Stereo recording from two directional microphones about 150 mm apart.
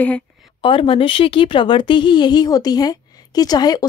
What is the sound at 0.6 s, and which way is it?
A woman's voice, 35° left (ahead or behind).